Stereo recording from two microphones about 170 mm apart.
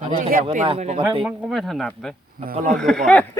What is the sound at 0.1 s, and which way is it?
Speech, 55° right (ahead or behind).